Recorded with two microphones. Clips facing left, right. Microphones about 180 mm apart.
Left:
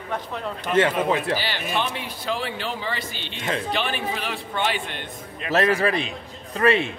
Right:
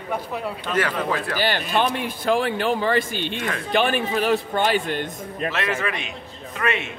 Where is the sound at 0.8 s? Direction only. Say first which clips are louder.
Left 4 dB; 20° left (ahead or behind).